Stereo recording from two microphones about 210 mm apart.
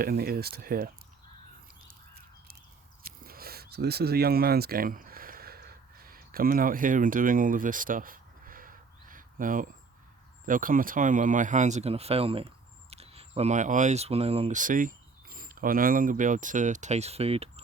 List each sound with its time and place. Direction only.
0.0 s speech: 45° right (ahead or behind)
3.0 s a sound: 45° right (ahead or behind)
10.4 s speech: 40° right (ahead or behind)